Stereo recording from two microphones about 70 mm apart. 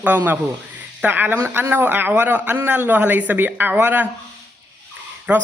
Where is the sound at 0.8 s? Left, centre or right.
Right.